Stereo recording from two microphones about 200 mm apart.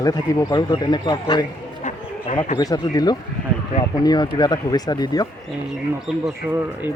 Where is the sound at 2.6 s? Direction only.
20° left (ahead or behind).